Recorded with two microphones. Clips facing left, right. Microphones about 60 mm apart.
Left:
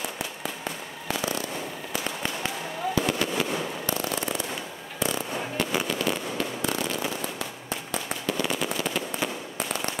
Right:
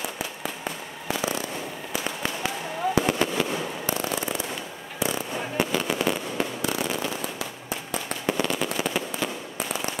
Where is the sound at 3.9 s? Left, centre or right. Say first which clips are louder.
Right 2 dB; right.